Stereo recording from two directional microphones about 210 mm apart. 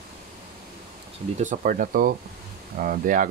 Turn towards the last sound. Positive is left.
turn(degrees=-40)  # may be behind; listen again after turning